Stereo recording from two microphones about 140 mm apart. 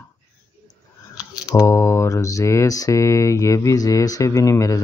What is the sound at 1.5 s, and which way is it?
Mantra, 20° left (ahead or behind).